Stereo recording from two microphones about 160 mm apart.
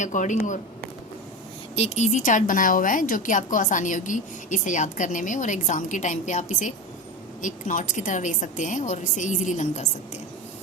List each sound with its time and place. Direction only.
0.0 s speech: 50° left (ahead or behind)
1.7 s speech: 45° left (ahead or behind)